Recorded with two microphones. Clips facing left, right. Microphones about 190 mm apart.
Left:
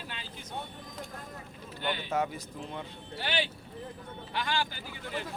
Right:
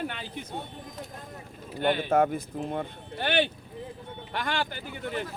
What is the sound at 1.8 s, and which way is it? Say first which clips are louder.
Speech: right 8 dB; 55° right (ahead or behind).